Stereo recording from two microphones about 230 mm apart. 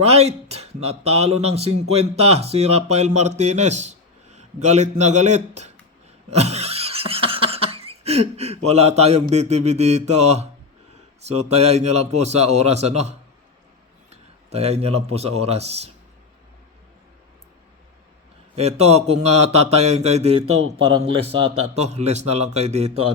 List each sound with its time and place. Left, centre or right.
0.0 s speech: right
6.3 s a sound: right
11.3 s a man's voice: right
18.5 s speech: right
20.5 s speech: right
21.0 s speech: right
21.4 s speech: right
21.8 s speech: right